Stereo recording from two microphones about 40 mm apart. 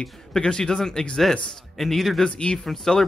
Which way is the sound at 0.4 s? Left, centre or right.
Centre.